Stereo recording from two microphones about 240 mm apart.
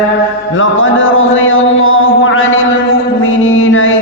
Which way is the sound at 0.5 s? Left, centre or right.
Left.